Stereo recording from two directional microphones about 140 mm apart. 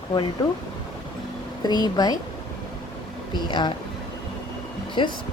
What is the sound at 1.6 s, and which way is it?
Speech, 30° left (ahead or behind).